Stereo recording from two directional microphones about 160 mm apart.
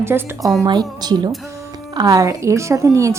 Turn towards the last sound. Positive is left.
turn(degrees=-20)  # may be behind; listen again after turning